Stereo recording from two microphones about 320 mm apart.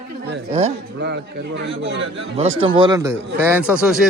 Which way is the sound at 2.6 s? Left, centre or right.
Centre.